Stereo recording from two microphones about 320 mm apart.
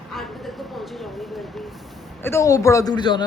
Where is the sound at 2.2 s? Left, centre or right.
Centre.